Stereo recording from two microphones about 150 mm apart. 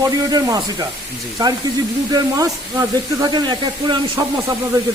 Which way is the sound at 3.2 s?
30° right (ahead or behind).